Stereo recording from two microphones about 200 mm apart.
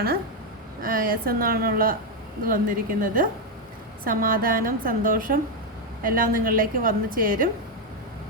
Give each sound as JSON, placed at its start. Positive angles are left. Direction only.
{"t": 0.8, "sound": "a woman's voice", "side_deg": -45}